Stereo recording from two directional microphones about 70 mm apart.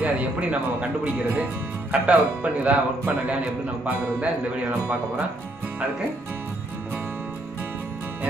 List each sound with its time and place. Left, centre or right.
0.0 s speech: right
1.9 s speech: centre
3.8 s speech: centre